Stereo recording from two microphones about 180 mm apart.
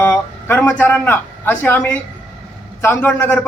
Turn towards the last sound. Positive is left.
turn(degrees=10)  # may be behind; listen again after turning